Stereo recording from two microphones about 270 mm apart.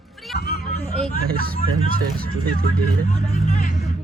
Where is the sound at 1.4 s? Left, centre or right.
Right.